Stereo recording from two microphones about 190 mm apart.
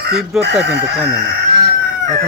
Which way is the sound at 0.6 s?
65° right (ahead or behind).